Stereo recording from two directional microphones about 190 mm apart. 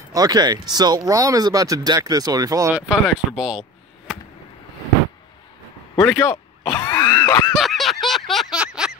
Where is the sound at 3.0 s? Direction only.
Centre (ahead or behind).